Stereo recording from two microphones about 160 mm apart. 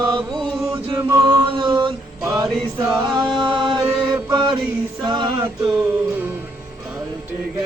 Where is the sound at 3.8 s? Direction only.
20° right (ahead or behind).